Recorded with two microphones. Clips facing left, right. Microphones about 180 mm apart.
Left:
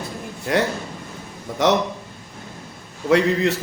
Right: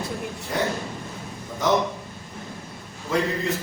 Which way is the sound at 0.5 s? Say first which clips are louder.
Left 5 dB; 80° left.